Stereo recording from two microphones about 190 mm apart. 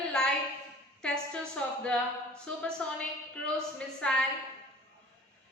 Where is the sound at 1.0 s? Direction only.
5° left (ahead or behind).